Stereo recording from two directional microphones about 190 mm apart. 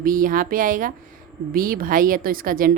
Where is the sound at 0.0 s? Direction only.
45° right (ahead or behind).